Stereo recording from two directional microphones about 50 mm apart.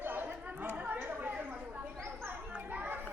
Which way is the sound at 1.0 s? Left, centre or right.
Right.